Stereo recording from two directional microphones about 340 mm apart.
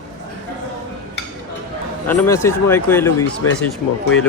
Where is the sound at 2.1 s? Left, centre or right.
Centre.